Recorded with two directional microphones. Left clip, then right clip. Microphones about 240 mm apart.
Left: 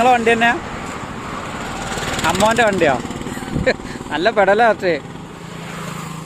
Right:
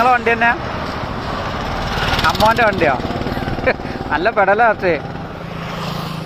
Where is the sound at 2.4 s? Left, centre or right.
Left.